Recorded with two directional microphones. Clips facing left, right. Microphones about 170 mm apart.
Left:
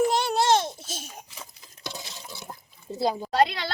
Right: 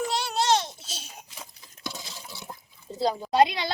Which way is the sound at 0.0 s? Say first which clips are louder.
Left 5 dB; 50° left (ahead or behind).